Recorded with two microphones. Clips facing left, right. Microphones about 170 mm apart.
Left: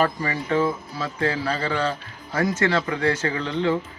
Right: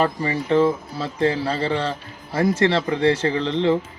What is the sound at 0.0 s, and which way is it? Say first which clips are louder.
Speech: right 2 dB; 25° right (ahead or behind).